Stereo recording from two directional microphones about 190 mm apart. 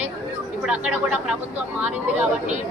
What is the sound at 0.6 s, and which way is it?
Speech, 5° right (ahead or behind).